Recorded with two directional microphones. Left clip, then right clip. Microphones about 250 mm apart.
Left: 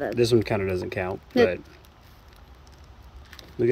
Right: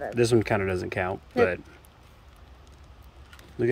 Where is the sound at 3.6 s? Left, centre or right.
Centre.